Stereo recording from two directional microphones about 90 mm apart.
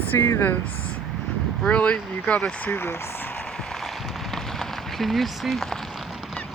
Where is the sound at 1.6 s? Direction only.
10° left (ahead or behind).